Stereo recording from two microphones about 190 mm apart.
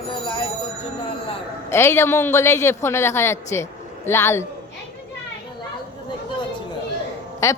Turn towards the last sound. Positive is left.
turn(degrees=15)  # may be behind; listen again after turning